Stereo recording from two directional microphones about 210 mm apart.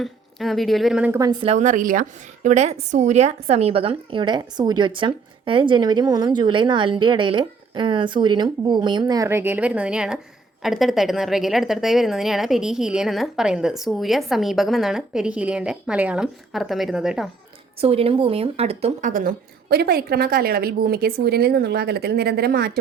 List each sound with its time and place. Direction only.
0.0 s a woman's voice: centre (ahead or behind)
17.7 s a woman's voice: 30° right (ahead or behind); by 22.8 s 50° right (ahead or behind)